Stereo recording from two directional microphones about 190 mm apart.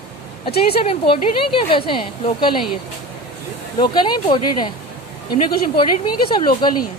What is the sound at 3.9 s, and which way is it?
A woman's voice, 25° left (ahead or behind).